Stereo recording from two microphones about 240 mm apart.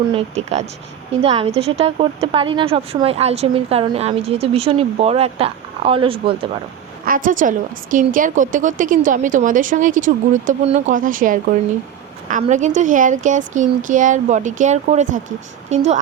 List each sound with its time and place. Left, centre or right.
0.1 s a woman's voice: right
7.0 s a woman's voice: right